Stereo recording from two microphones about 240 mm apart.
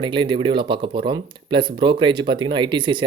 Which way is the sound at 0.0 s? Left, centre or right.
Centre.